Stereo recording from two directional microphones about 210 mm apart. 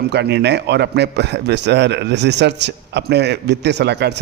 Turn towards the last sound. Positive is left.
turn(degrees=-55)  # may be behind; listen again after turning